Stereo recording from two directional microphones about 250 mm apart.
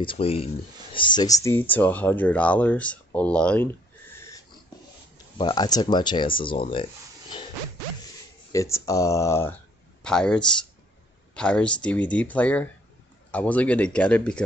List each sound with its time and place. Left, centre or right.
0.0 s speech: left; by 3.7 s centre
5.4 s speech: centre
8.5 s speech: centre